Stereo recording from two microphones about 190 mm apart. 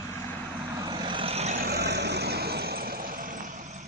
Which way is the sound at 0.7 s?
20° right (ahead or behind).